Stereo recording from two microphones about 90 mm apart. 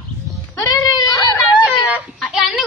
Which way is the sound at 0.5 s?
45° left (ahead or behind).